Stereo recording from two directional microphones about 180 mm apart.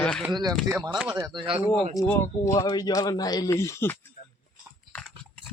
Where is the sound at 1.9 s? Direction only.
15° left (ahead or behind).